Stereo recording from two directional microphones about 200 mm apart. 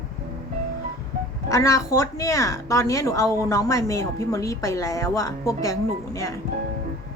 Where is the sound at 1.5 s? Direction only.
15° left (ahead or behind).